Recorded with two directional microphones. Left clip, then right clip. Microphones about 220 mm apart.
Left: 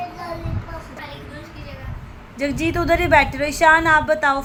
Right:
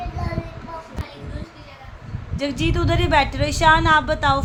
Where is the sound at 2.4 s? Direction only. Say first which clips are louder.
Left 2 dB; 5° left (ahead or behind).